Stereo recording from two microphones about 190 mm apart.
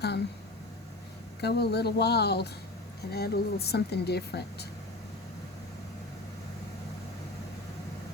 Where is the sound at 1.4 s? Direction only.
60° left (ahead or behind).